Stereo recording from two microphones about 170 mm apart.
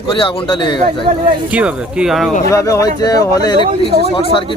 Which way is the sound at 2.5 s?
20° left (ahead or behind).